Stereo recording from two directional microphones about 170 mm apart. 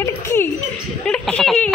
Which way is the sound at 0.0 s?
15° left (ahead or behind).